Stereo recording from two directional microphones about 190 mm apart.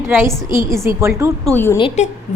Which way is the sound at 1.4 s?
10° left (ahead or behind).